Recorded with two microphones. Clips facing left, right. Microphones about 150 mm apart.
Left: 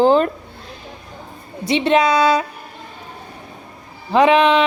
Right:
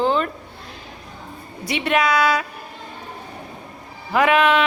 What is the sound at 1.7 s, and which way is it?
Speech, 25° left (ahead or behind).